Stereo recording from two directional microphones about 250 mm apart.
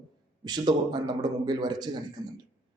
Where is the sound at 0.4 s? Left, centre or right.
Centre.